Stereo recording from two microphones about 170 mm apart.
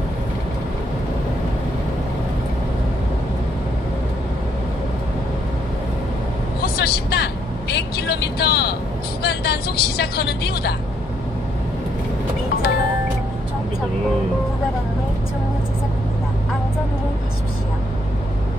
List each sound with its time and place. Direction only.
6.6 s vehicle: 70° left (ahead or behind)
9.2 s speech: 70° left (ahead or behind)